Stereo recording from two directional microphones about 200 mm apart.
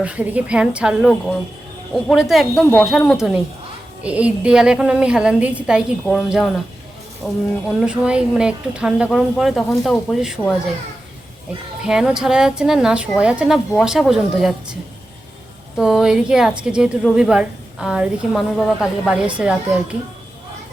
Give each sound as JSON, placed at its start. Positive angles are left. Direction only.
{"t": 0.0, "sound": "speech", "side_deg": -5}
{"t": 11.8, "sound": "speech", "side_deg": -5}
{"t": 15.8, "sound": "speech", "side_deg": 0}